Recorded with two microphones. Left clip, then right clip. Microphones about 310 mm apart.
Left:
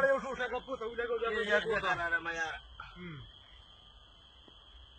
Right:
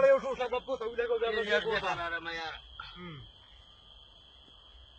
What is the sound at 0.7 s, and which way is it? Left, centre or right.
Speech, right.